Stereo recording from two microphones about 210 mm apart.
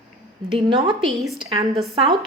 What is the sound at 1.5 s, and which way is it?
Speech, 25° right (ahead or behind).